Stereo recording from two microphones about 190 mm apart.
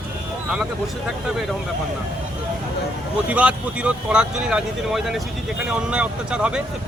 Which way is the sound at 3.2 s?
5° right (ahead or behind).